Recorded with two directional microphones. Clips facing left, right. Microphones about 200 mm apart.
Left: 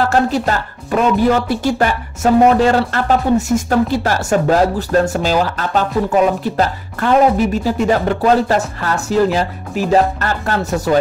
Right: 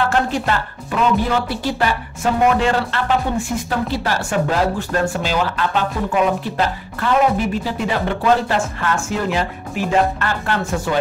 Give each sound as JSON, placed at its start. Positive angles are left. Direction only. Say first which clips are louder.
{"t": 0.0, "sound": "speech", "louder": "left 4 dB", "side_deg": 40}